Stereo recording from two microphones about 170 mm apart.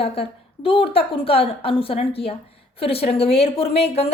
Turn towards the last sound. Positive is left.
turn(degrees=35)  # may be behind; listen again after turning